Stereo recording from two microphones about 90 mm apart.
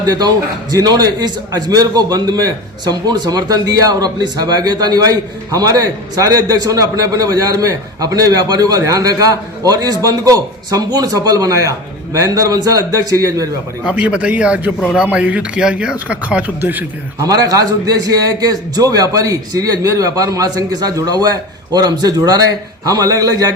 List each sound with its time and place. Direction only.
0.0 s a man's voice: 45° right (ahead or behind)
13.8 s speech: 15° right (ahead or behind)
14.8 s a man's voice: centre (ahead or behind)
15.0 s a man's voice: 15° right (ahead or behind)
17.2 s a man's voice: 40° right (ahead or behind)